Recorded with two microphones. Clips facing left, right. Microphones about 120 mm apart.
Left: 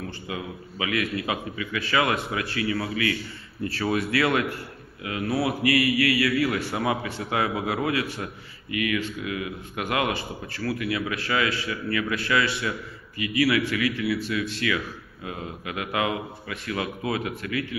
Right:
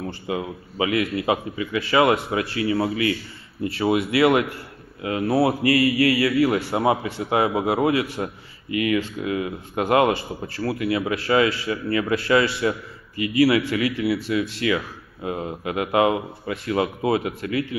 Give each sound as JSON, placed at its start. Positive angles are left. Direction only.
{"t": 0.0, "sound": "a man's voice", "side_deg": -30}